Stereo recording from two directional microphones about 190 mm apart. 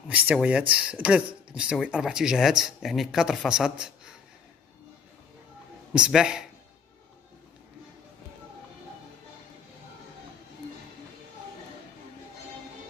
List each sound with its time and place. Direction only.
0.1 s speech: 10° right (ahead or behind)
5.9 s speech: 5° right (ahead or behind)